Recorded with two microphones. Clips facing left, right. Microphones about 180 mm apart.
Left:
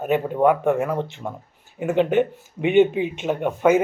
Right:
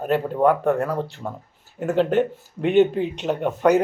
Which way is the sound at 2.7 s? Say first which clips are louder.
Left 1 dB; centre (ahead or behind).